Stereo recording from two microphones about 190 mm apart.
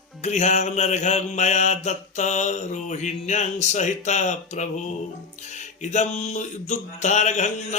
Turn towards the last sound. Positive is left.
turn(degrees=40)  # may be behind; listen again after turning